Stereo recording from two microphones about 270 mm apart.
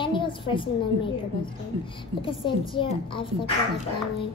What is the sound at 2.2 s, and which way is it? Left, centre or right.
A child's voice, centre.